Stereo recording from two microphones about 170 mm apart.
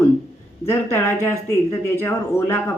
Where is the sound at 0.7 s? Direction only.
15° left (ahead or behind).